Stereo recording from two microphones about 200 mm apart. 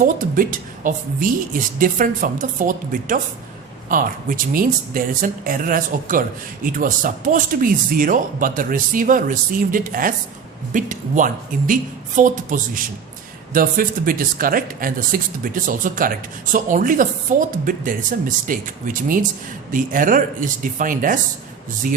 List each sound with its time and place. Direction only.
0.0 s speech: 45° right (ahead or behind)